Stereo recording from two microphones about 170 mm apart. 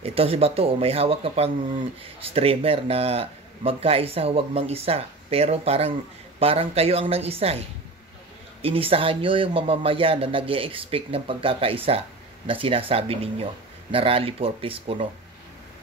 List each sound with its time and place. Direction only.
0.0 s a man's voice: 35° right (ahead or behind)
8.6 s a man's voice: 35° right (ahead or behind)